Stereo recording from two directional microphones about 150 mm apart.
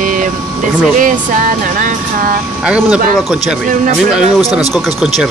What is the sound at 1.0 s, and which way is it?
Speech, 60° right (ahead or behind).